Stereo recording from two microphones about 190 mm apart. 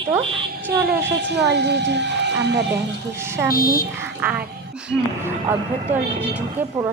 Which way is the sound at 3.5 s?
50° left (ahead or behind).